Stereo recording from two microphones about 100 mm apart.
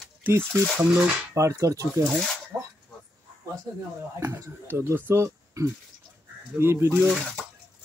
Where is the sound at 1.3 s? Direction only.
30° right (ahead or behind).